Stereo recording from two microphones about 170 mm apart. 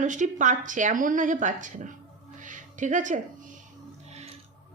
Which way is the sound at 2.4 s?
50° right (ahead or behind).